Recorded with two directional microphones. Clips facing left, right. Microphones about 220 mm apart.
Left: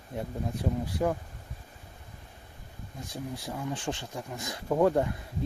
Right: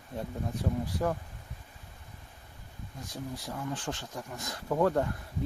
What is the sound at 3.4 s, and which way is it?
Speech, 15° left (ahead or behind).